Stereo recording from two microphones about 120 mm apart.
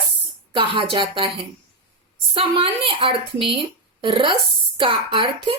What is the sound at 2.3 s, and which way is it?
A woman's voice, 50° right (ahead or behind).